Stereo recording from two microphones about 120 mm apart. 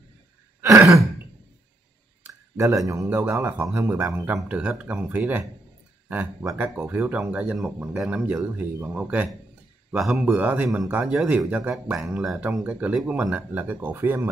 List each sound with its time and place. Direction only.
0.6 s sigh: 25° right (ahead or behind)
2.5 s a man's voice: 25° right (ahead or behind)
9.8 s speech: centre (ahead or behind)
10.2 s speech: 15° right (ahead or behind)